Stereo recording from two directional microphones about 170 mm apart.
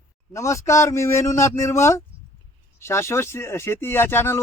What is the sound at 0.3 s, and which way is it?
Speech, 15° left (ahead or behind).